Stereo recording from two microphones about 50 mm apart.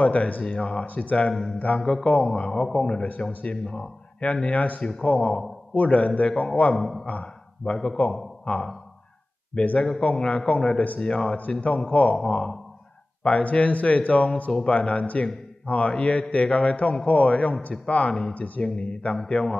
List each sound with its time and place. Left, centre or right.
0.0 s speech: left
1.3 s a sound: centre
1.8 s a man's voice: centre
2.2 s speech: centre
6.8 s speech: centre
7.1 s a sound: left
7.7 s a man's voice: centre
8.0 s a man's voice: left
11.9 s speech: left
12.3 s a man's voice: centre
13.2 s a man's voice: left